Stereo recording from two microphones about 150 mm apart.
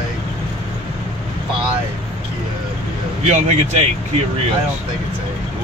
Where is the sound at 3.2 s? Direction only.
45° right (ahead or behind).